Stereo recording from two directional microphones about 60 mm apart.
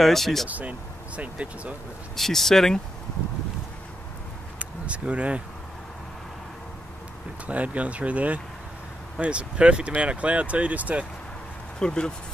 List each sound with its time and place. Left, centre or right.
0.0 s speech: centre
0.5 s speech: right
2.1 s speech: centre
4.6 s a sound: right
7.4 s speech: right
11.8 s speech: centre